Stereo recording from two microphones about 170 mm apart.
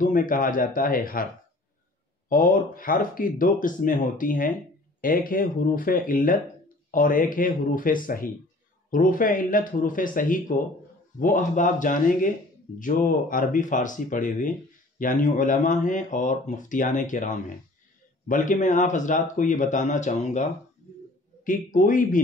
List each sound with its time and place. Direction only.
0.0 s speech: 55° left (ahead or behind)
21.5 s speech: 50° left (ahead or behind)